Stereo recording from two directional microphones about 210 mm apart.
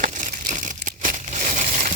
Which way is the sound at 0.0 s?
35° right (ahead or behind).